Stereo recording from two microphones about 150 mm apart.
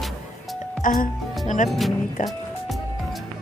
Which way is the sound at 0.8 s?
70° left (ahead or behind).